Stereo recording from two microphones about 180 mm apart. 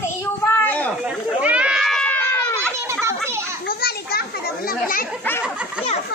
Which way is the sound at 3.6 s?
60° left (ahead or behind).